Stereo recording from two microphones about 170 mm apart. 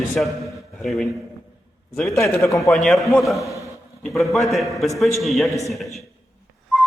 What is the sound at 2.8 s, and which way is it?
Speech, 5° left (ahead or behind).